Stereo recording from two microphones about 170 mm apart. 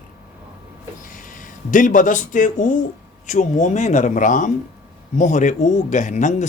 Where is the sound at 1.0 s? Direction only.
50° left (ahead or behind).